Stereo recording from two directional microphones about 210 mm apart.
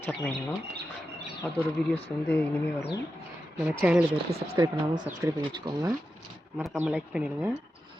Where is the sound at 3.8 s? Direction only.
5° right (ahead or behind).